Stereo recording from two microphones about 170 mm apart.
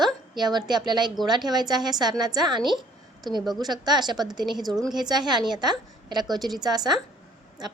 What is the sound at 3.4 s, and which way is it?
A woman's voice, 25° right (ahead or behind).